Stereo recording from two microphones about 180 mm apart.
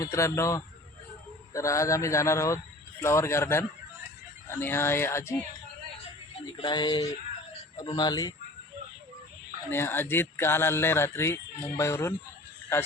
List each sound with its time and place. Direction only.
0.0 s speech: 15° left (ahead or behind)
6.6 s a sound: 25° left (ahead or behind)
9.6 s speech: 15° left (ahead or behind)